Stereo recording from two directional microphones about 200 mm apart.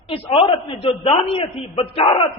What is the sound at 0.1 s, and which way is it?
A man's voice, 30° left (ahead or behind).